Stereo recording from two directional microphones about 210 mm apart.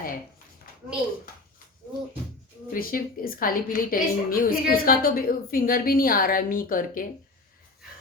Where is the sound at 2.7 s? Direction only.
40° left (ahead or behind).